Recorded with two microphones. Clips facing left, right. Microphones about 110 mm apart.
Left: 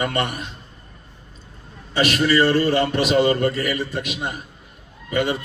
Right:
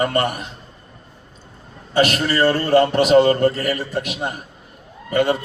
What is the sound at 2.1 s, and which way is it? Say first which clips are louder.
A man's voice: left 1 dB; 40° right (ahead or behind).